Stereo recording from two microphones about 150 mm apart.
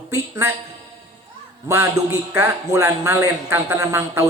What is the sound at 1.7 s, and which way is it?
A man's voice, 20° right (ahead or behind).